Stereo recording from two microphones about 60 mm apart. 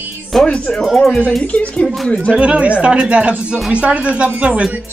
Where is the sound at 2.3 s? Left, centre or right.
Centre.